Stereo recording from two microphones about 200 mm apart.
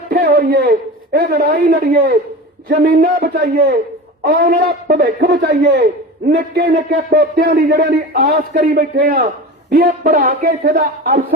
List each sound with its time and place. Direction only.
0.1 s a man's voice: 50° right (ahead or behind)